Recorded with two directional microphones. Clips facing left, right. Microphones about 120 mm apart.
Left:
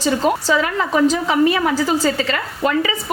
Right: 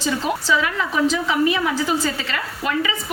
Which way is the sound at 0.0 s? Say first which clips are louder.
Left 5 dB; 40° left (ahead or behind).